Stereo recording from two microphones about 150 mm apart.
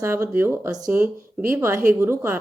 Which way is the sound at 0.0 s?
15° right (ahead or behind).